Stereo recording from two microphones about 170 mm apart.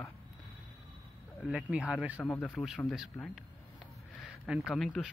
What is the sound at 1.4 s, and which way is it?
Speech, 5° right (ahead or behind).